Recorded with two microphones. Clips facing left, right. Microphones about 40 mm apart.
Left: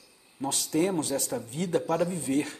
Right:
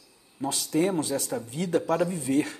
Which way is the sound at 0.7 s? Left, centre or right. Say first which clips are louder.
Right 1 dB; centre.